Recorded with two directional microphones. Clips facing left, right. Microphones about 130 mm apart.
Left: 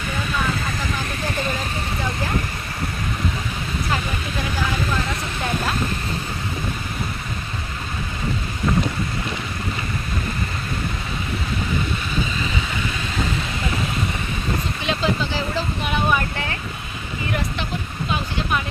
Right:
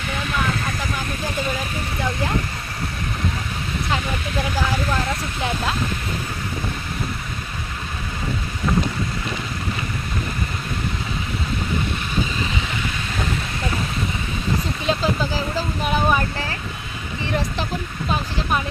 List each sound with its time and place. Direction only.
14.8 s speech: 40° right (ahead or behind)